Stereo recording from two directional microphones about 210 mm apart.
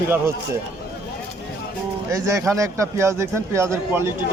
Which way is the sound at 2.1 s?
15° right (ahead or behind).